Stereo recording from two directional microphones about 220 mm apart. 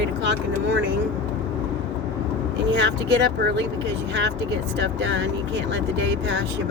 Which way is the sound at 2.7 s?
50° right (ahead or behind).